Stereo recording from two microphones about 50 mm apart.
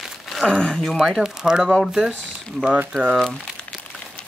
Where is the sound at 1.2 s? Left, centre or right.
Centre.